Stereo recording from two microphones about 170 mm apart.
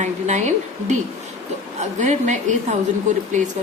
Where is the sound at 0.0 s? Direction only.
45° right (ahead or behind).